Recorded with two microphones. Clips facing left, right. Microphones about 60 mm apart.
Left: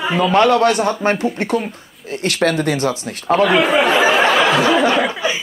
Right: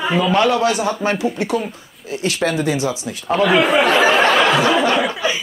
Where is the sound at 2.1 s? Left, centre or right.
Left.